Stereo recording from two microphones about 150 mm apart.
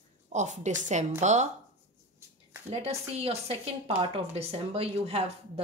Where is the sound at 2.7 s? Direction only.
45° right (ahead or behind).